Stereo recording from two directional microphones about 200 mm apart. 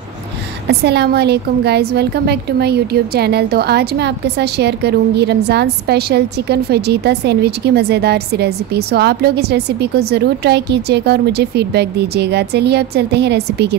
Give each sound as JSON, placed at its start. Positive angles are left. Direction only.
{"t": 0.7, "sound": "a woman's voice", "side_deg": -55}